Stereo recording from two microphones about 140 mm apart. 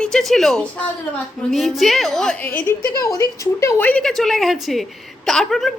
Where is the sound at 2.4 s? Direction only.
15° left (ahead or behind).